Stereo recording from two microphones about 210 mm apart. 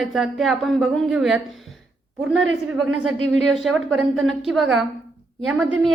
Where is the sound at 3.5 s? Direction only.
Centre (ahead or behind).